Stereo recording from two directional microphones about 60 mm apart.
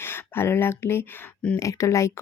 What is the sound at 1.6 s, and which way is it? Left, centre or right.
Speech, left.